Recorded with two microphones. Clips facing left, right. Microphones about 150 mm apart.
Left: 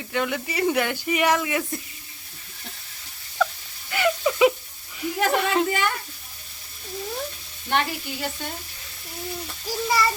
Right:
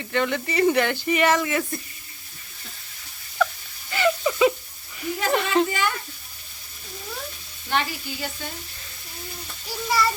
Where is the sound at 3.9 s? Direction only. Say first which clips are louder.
Even; 5° left (ahead or behind).